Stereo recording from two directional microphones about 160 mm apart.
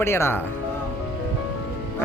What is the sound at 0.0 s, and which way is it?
Speech, 15° left (ahead or behind).